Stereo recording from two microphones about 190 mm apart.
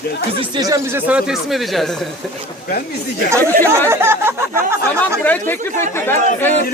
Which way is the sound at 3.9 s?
10° right (ahead or behind).